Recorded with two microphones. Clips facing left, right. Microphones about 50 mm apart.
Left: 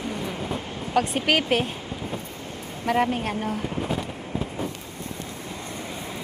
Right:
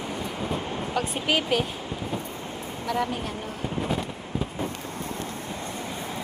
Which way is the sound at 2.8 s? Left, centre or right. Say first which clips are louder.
Left 5 dB; left.